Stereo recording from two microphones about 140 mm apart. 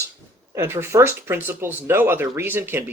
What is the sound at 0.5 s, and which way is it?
Speech, 20° right (ahead or behind).